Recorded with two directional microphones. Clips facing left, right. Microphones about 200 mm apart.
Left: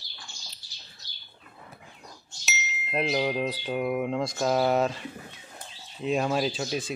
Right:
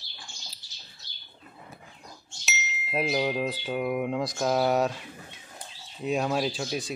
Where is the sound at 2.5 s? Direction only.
Centre (ahead or behind).